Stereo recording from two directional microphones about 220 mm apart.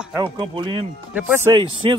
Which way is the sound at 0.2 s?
20° right (ahead or behind).